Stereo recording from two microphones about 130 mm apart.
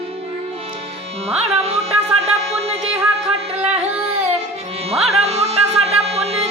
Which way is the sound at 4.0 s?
50° right (ahead or behind).